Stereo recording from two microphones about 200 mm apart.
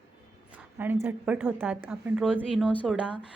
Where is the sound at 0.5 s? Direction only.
10° right (ahead or behind).